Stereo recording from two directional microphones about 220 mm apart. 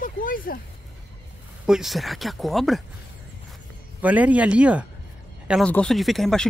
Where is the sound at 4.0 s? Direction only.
5° right (ahead or behind).